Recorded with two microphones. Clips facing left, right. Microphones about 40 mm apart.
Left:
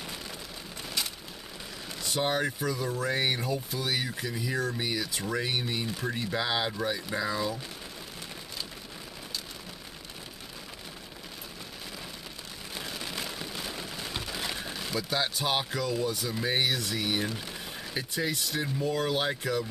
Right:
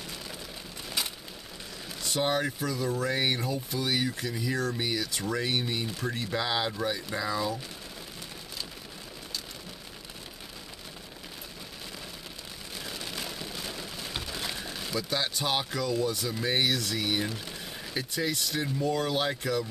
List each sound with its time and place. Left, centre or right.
2.0 s speech: centre
12.8 s rain on surface: centre
14.2 s speech: centre